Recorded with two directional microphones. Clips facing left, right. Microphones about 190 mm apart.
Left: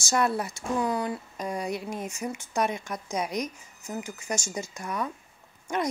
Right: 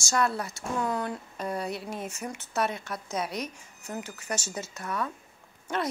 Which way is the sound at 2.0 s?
10° left (ahead or behind).